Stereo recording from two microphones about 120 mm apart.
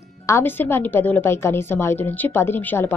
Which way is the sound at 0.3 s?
15° left (ahead or behind).